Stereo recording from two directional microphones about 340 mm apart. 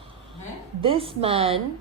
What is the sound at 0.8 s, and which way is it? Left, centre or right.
Speech, centre.